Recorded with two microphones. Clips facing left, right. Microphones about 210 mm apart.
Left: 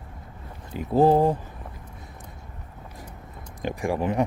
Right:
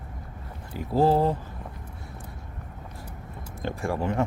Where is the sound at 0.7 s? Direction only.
20° left (ahead or behind).